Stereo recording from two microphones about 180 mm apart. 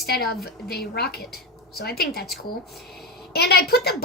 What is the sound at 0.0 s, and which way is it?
A woman's voice, 60° left (ahead or behind).